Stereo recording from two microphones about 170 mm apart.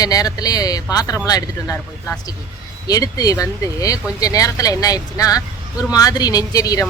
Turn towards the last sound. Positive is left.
turn(degrees=20)  # may be behind; listen again after turning